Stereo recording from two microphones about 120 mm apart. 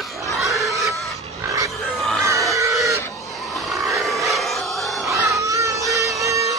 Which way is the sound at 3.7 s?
25° right (ahead or behind).